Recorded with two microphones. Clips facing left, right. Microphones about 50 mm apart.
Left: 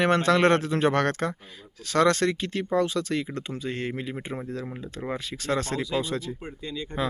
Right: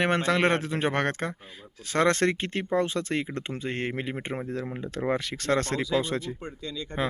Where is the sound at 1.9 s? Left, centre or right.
Right.